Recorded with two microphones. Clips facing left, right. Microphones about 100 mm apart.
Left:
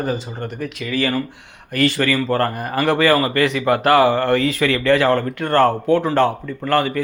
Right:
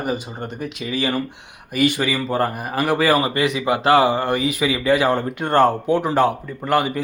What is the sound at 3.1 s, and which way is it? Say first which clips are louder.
Speech: left 2 dB; 15° right (ahead or behind).